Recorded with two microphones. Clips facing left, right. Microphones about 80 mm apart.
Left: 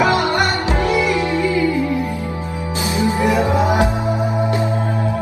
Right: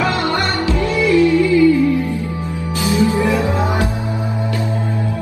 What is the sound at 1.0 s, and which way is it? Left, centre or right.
Music, left.